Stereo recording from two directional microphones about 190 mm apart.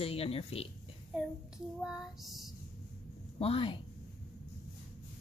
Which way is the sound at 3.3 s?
30° left (ahead or behind).